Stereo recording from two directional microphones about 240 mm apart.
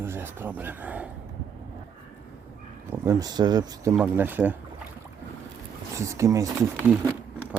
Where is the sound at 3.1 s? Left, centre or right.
Centre.